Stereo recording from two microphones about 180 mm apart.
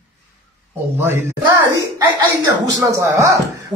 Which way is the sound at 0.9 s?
15° right (ahead or behind).